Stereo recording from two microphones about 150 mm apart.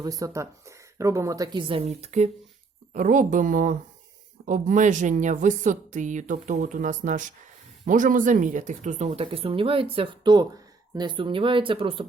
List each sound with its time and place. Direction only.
0.0 s a woman's voice: 25° right (ahead or behind); by 2.3 s 50° right (ahead or behind)
2.9 s speech: 60° right (ahead or behind)
9.2 s speech: 40° right (ahead or behind)